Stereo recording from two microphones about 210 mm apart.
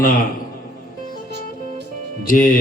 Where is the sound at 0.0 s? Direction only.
40° left (ahead or behind).